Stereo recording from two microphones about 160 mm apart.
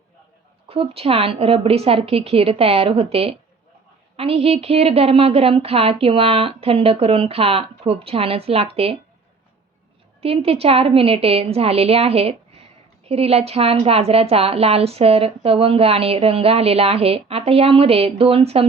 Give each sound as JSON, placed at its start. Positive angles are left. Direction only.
{"t": 0.7, "sound": "a woman's voice", "side_deg": -35}
{"t": 10.2, "sound": "a woman's voice", "side_deg": -40}